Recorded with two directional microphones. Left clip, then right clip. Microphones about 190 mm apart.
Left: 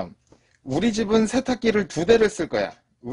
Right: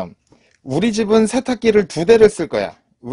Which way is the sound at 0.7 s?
40° right (ahead or behind).